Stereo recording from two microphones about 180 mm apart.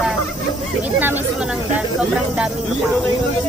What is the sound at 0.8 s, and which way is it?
Speech, 10° right (ahead or behind).